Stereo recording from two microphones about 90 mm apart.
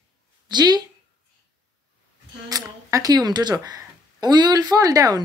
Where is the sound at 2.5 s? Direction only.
45° right (ahead or behind).